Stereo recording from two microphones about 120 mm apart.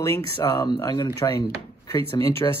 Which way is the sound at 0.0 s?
25° left (ahead or behind).